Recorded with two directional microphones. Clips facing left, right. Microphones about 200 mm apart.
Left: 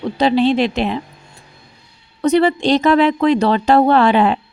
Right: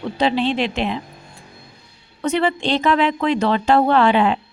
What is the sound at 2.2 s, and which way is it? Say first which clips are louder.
A woman's voice: left 6 dB; 40° left (ahead or behind).